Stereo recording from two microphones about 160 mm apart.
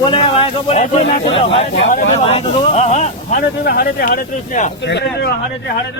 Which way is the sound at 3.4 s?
70° left (ahead or behind).